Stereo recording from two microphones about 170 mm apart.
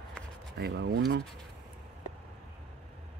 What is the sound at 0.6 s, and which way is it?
Speech, 80° right.